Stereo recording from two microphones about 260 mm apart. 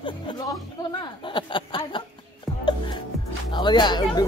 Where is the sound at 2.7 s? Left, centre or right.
Centre.